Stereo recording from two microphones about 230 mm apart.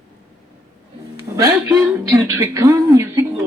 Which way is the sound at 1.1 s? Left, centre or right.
Centre.